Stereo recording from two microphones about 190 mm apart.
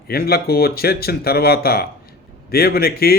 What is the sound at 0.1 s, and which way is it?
Speech, 55° left (ahead or behind).